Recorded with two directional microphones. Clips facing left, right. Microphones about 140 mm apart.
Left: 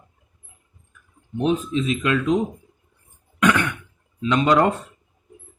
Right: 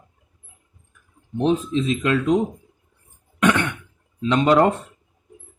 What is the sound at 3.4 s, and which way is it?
Throat clearing, 25° right (ahead or behind).